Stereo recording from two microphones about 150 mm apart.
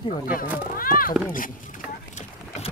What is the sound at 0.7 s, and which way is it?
Speech, 70° left (ahead or behind).